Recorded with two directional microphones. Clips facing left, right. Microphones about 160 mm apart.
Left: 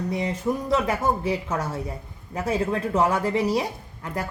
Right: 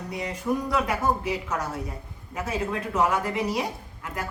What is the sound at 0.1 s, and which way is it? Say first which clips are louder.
Speech: even; 30° left (ahead or behind).